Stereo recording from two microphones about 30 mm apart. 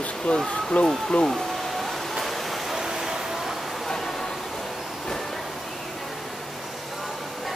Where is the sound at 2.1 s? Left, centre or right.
Centre.